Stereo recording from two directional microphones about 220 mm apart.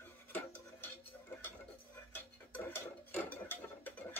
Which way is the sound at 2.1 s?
10° left (ahead or behind).